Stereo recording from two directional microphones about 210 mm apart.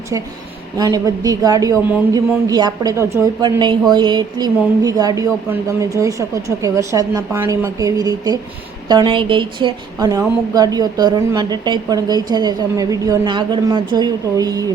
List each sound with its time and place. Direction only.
0.8 s a woman's voice: 15° right (ahead or behind)